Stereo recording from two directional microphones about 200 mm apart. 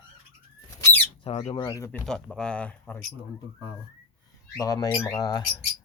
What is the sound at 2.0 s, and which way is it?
Speech, 5° left (ahead or behind).